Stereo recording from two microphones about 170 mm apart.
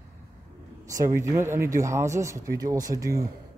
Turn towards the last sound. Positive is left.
turn(degrees=-20)  # may be behind; listen again after turning